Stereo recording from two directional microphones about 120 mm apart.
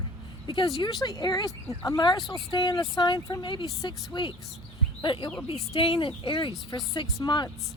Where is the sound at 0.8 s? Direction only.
35° left (ahead or behind).